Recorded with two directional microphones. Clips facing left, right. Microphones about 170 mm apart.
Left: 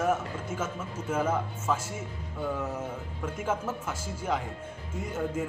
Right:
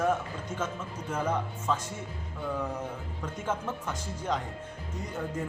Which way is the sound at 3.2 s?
10° left (ahead or behind).